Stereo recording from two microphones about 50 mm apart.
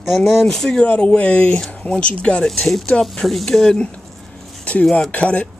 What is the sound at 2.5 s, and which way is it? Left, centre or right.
Speech, centre.